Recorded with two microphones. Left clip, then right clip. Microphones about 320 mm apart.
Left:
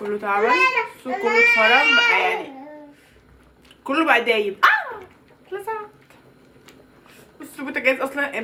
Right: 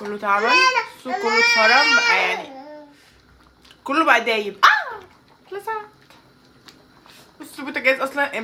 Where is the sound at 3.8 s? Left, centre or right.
Right.